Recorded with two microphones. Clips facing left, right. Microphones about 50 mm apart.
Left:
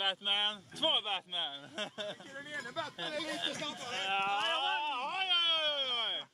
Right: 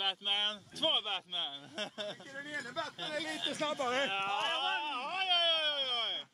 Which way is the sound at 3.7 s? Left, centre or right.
Right.